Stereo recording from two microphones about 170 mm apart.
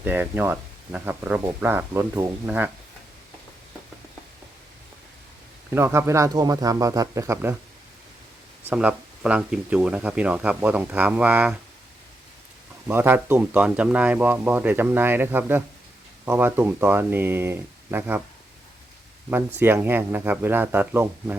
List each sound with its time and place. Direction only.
0.0 s speech: 10° right (ahead or behind)
5.7 s speech: 15° right (ahead or behind)
8.7 s speech: 5° right (ahead or behind)
12.9 s speech: 10° right (ahead or behind)
19.5 s speech: 10° right (ahead or behind)